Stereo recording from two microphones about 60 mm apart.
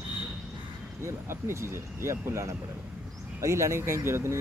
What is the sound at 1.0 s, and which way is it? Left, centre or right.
Speech, right.